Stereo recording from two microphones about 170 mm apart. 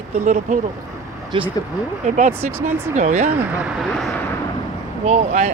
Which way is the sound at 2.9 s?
45° right (ahead or behind).